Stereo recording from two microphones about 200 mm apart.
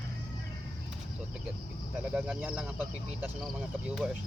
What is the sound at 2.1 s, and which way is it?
Speech, 5° right (ahead or behind).